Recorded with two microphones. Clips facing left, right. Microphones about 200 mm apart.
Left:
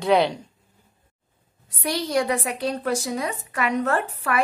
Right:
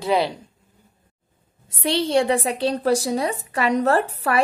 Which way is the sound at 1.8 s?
25° right (ahead or behind).